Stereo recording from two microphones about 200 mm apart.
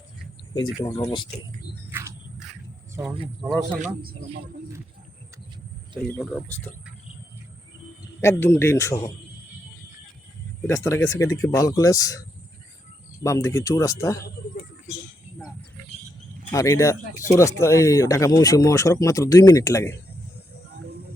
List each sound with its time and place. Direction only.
0.5 s speech: 20° left (ahead or behind)
1.9 s a sound: 15° right (ahead or behind)
3.8 s speech: 35° right (ahead or behind)
6.0 s speech: 5° left (ahead or behind)
8.2 s speech: 15° left (ahead or behind)
10.7 s speech: 15° left (ahead or behind)
13.2 s speech: 15° left (ahead or behind)
16.5 s speech: 15° left (ahead or behind)